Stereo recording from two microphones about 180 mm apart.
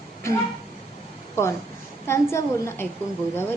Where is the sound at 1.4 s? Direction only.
15° left (ahead or behind).